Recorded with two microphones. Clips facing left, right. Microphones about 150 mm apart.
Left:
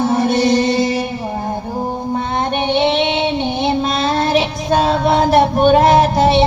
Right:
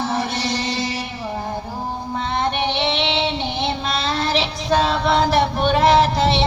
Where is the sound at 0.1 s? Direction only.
50° left (ahead or behind).